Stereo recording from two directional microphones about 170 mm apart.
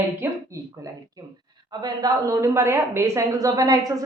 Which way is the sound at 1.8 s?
25° right (ahead or behind).